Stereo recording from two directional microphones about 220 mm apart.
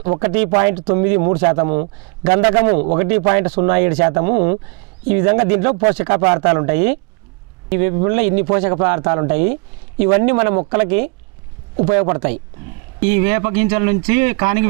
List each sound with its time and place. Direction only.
0.0 s speech: 15° right (ahead or behind)
2.7 s speech: 35° right (ahead or behind)
3.0 s speech: 15° right (ahead or behind)